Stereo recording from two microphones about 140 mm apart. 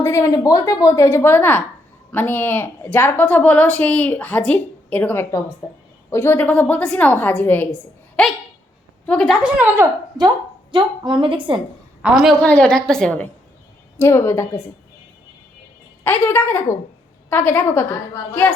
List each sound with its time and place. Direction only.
0.0 s a woman's voice: 20° left (ahead or behind); by 9.8 s 10° right (ahead or behind)
10.2 s a woman's voice: 30° right (ahead or behind)
12.2 s a woman's voice: 5° left (ahead or behind)
14.0 s a woman's voice: 20° left (ahead or behind)
16.0 s a woman's voice: 15° left (ahead or behind)